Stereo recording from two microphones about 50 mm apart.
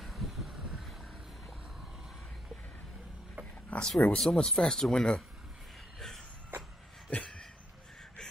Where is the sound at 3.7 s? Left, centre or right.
Left.